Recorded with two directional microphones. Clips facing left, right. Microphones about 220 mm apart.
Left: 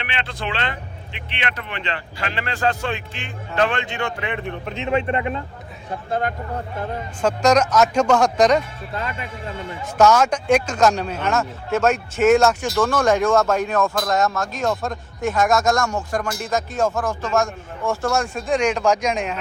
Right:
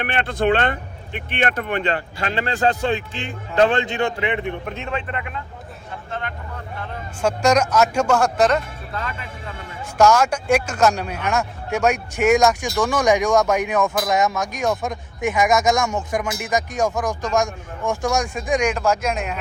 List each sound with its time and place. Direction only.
0.0 s speech: 50° right (ahead or behind)
4.2 s a man's voice: 20° right (ahead or behind)
4.9 s speech: 25° left (ahead or behind)
6.1 s speech: 40° left (ahead or behind)
7.2 s speech: 10° right (ahead or behind)
9.8 s speech: 10° right (ahead or behind)